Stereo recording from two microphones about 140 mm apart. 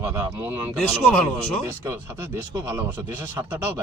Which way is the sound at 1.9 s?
15° right (ahead or behind).